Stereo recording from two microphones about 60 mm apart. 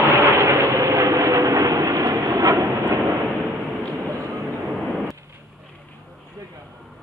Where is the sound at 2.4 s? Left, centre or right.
Right.